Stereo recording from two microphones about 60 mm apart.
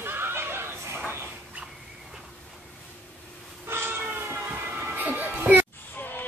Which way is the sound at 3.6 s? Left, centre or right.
Right.